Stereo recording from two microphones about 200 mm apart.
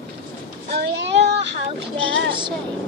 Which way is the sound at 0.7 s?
60° right (ahead or behind).